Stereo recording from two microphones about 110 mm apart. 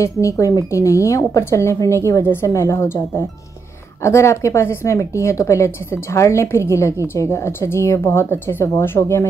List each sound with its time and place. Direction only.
0.0 s speech: 30° left (ahead or behind)